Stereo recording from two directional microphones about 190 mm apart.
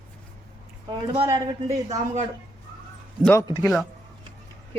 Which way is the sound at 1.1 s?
30° right (ahead or behind).